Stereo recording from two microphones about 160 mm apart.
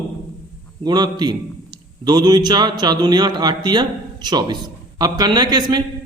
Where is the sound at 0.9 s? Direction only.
25° right (ahead or behind).